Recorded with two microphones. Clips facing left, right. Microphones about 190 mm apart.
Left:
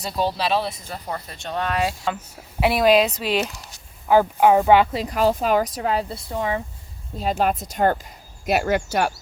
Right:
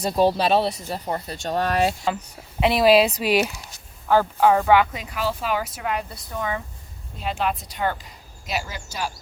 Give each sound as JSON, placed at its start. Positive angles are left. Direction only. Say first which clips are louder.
{"t": 0.0, "sound": "speech", "louder": "right 5 dB", "side_deg": -40}
{"t": 1.5, "sound": "speech", "louder": "right 2 dB", "side_deg": -40}
{"t": 2.0, "sound": "speech", "louder": "right 1 dB", "side_deg": 5}
{"t": 2.8, "sound": "speech", "louder": "right 1 dB", "side_deg": -5}
{"t": 4.1, "sound": "speech", "louder": "left 2 dB", "side_deg": 15}
{"t": 7.2, "sound": "speech", "louder": "left 4 dB", "side_deg": 40}
{"t": 8.4, "sound": "speech", "louder": "left 10 dB", "side_deg": 60}